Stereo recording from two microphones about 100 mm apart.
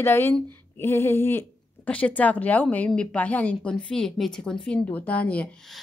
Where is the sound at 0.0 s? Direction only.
25° left (ahead or behind).